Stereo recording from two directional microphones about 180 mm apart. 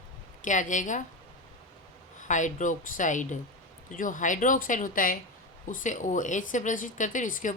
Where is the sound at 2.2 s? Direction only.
45° left (ahead or behind).